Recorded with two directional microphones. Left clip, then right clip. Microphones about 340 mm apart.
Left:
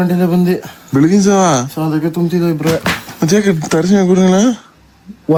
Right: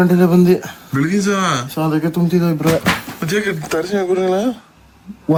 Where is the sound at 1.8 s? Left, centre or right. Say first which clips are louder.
Left 2 dB; centre.